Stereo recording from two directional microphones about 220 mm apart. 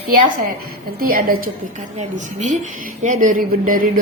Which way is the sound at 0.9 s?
40° right (ahead or behind).